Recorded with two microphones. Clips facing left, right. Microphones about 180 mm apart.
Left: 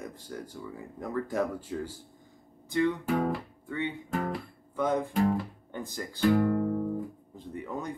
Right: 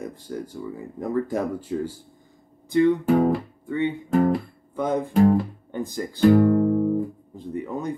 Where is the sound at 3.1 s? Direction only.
45° right (ahead or behind); by 6.8 s 60° right (ahead or behind).